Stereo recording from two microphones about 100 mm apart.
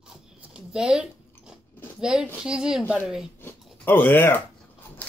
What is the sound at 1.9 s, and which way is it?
A woman's voice, 10° right (ahead or behind).